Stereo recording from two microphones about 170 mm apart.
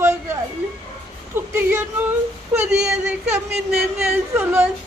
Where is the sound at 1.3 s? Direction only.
15° right (ahead or behind).